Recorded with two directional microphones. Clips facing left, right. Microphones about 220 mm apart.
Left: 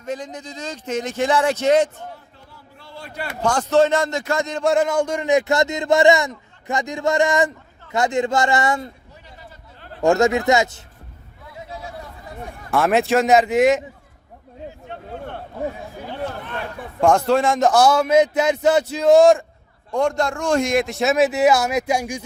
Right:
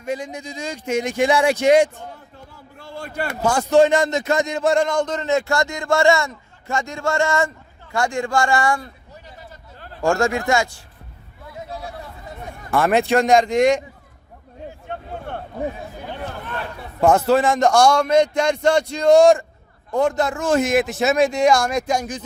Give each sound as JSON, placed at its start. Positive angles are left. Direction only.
{"t": 0.0, "sound": "speech", "side_deg": -10}
{"t": 2.7, "sound": "a sound", "side_deg": -50}
{"t": 3.4, "sound": "speech", "side_deg": -10}
{"t": 4.6, "sound": "a man's voice", "side_deg": 5}
{"t": 10.0, "sound": "speech", "side_deg": 20}
{"t": 12.7, "sound": "a man's voice", "side_deg": 0}
{"t": 17.0, "sound": "a man's voice", "side_deg": -5}